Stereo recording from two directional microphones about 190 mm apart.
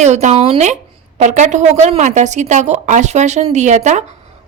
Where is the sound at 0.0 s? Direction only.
35° right (ahead or behind).